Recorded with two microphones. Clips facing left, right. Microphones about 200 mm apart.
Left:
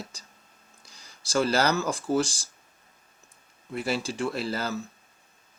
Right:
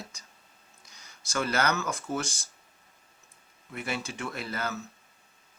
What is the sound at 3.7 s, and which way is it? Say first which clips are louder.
Speech: left 6 dB; 30° left (ahead or behind).